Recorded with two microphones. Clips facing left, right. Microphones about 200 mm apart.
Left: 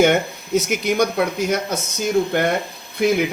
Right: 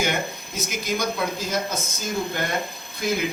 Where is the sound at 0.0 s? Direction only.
65° left (ahead or behind).